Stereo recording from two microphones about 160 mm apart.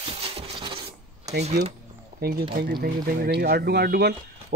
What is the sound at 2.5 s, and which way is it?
Speech, 65° right (ahead or behind).